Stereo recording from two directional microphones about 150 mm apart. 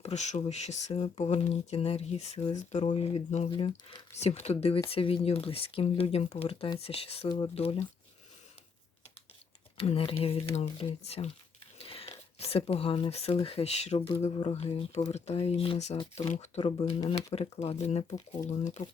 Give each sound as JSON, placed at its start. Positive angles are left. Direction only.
{"t": 0.0, "sound": "speech", "side_deg": 50}
{"t": 2.9, "sound": "speech", "side_deg": 40}
{"t": 7.3, "sound": "speech", "side_deg": 30}
{"t": 7.5, "sound": "speech", "side_deg": 40}
{"t": 9.7, "sound": "speech", "side_deg": 40}